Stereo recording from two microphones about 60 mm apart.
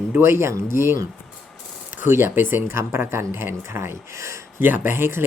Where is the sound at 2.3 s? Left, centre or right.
Right.